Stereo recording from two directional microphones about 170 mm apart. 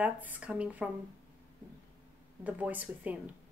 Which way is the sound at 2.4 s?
10° right (ahead or behind).